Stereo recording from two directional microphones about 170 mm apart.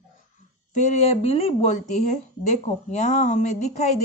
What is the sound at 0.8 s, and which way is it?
Speech, 40° left (ahead or behind).